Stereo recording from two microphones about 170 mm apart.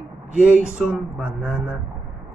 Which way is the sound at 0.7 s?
5° right (ahead or behind).